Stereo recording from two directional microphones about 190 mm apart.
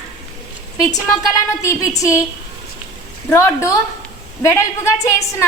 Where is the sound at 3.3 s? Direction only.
15° left (ahead or behind).